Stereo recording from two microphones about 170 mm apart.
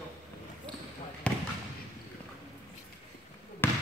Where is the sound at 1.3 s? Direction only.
5° left (ahead or behind).